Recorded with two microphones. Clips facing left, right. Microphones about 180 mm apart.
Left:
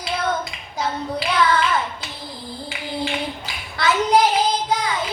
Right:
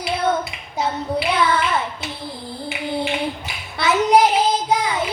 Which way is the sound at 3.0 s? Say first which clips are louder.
Left 1 dB; 25° right (ahead or behind).